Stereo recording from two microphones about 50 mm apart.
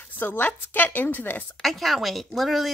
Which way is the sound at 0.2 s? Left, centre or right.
Left.